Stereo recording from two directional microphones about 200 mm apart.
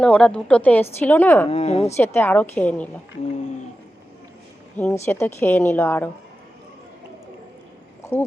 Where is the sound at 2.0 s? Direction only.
10° left (ahead or behind).